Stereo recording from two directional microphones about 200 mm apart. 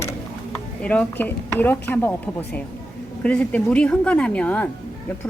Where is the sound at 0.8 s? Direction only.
5° left (ahead or behind).